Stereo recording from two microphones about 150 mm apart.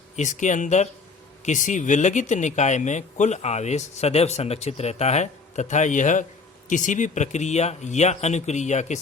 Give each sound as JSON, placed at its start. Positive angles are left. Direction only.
{"t": 0.2, "sound": "speech", "side_deg": 55}